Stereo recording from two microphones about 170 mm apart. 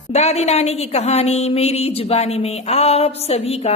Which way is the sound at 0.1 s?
40° left (ahead or behind).